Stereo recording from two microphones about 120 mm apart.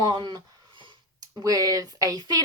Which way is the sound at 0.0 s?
35° right (ahead or behind).